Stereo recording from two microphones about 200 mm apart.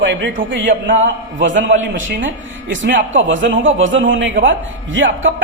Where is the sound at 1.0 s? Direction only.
70° right (ahead or behind).